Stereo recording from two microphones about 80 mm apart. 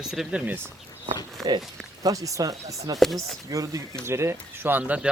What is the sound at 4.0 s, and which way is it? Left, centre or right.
Speech, right.